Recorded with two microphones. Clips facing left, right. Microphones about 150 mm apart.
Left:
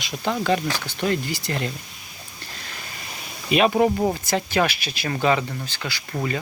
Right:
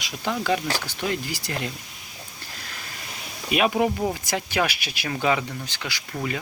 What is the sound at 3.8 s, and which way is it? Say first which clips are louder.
Speech: left 4 dB; 20° left (ahead or behind).